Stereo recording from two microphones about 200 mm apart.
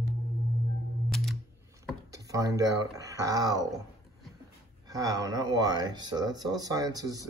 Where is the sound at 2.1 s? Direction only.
15° right (ahead or behind).